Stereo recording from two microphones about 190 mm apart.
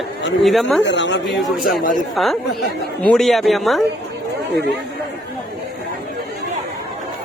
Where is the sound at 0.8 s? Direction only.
70° left (ahead or behind).